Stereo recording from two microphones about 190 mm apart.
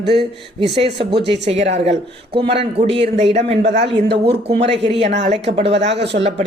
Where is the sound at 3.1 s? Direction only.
35° right (ahead or behind).